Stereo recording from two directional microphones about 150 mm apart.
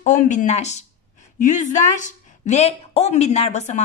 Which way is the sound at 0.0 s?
55° left (ahead or behind).